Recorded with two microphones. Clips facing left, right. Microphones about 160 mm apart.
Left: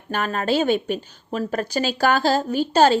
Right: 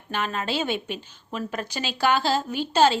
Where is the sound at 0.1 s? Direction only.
45° left (ahead or behind).